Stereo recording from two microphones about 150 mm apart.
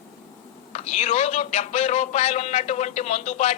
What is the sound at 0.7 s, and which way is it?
A man's voice, 50° left (ahead or behind).